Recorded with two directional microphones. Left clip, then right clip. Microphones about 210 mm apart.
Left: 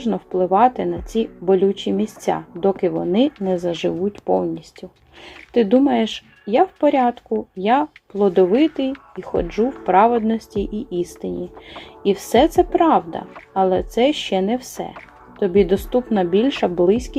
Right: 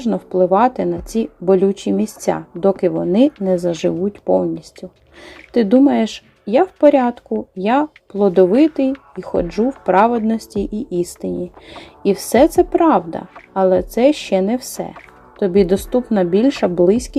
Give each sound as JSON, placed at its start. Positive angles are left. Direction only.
{"t": 0.0, "sound": "speech", "side_deg": -20}
{"t": 5.5, "sound": "speech", "side_deg": -20}